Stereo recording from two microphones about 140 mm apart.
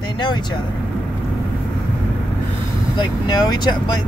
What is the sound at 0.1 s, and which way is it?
Speech, 35° left (ahead or behind).